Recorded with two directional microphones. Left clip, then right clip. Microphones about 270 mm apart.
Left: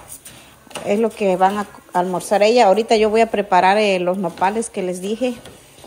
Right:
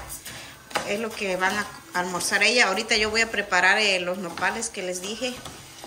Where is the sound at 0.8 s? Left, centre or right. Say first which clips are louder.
Left 14 dB; centre.